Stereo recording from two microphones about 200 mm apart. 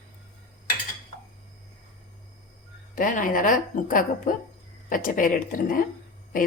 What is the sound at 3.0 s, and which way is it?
A woman's voice, 40° left (ahead or behind).